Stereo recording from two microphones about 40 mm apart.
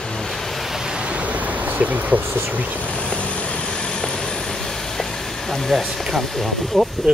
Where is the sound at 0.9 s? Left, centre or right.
Right.